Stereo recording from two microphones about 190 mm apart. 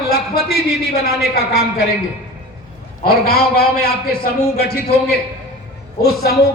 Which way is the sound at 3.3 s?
55° left (ahead or behind).